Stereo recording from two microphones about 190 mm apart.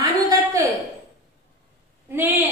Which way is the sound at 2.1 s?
10° right (ahead or behind).